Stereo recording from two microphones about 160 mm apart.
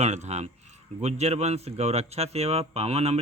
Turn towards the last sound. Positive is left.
turn(degrees=-40)  # may be behind; listen again after turning